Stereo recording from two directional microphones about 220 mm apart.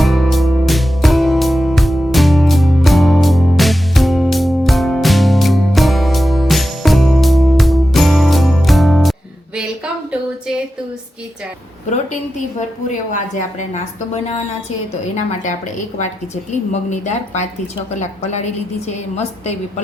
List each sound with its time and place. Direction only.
0.0 s music: centre (ahead or behind)
9.6 s a sound: 5° right (ahead or behind)
13.1 s a woman's voice: 35° left (ahead or behind)